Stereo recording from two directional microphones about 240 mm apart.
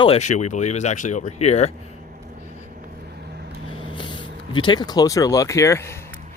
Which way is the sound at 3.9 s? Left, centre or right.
Centre.